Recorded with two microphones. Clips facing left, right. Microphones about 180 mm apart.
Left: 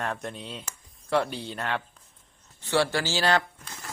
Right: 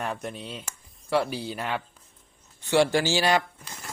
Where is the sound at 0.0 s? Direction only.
5° right (ahead or behind).